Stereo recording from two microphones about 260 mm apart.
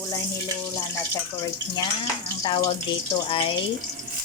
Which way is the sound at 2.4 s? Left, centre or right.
Centre.